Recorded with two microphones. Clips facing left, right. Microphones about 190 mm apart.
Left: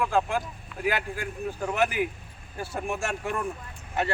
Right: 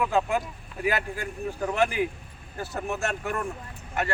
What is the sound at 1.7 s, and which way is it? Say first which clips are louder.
Speech: right 1 dB; 5° left (ahead or behind).